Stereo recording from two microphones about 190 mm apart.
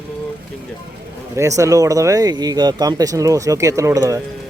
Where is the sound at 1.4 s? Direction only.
15° right (ahead or behind).